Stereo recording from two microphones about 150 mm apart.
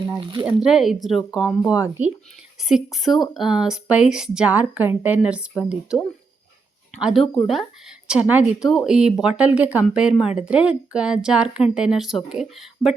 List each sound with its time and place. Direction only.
0.2 s speech: 35° right (ahead or behind)
0.4 s speech: 5° right (ahead or behind)
7.0 s speech: centre (ahead or behind)